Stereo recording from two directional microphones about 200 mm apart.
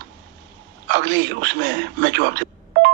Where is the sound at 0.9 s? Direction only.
60° right (ahead or behind).